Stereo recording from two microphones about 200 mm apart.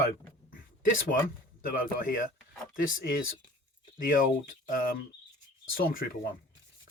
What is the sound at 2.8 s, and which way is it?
Speech, 45° left (ahead or behind).